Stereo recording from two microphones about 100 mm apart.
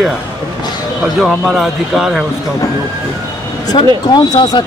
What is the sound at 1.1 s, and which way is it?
Speech, centre (ahead or behind).